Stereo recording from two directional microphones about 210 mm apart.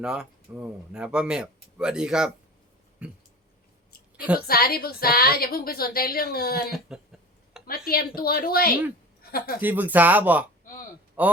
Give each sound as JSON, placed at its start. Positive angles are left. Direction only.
{"t": 0.0, "sound": "speech", "side_deg": -5}
{"t": 4.4, "sound": "a woman's voice", "side_deg": 45}
{"t": 6.7, "sound": "speech", "side_deg": 0}
{"t": 7.7, "sound": "a woman's voice", "side_deg": 45}
{"t": 9.6, "sound": "speech", "side_deg": -10}